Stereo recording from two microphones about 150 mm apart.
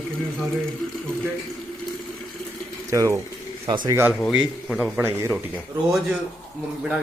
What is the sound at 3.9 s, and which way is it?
Speech, 15° right (ahead or behind).